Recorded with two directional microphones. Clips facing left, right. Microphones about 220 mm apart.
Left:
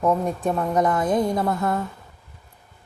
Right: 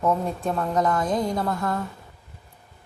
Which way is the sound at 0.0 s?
15° left (ahead or behind).